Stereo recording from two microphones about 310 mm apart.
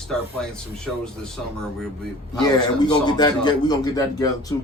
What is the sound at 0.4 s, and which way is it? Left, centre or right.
A man's voice, centre.